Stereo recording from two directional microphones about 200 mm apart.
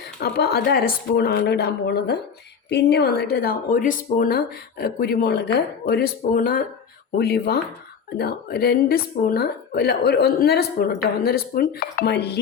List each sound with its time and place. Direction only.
0.2 s speech: 50° left (ahead or behind)